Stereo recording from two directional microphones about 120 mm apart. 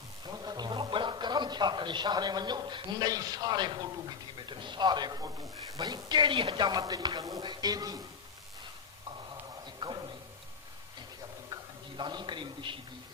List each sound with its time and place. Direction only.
0.3 s speech: 35° right (ahead or behind)
9.6 s a sound: 40° right (ahead or behind)
11.9 s speech: 40° right (ahead or behind)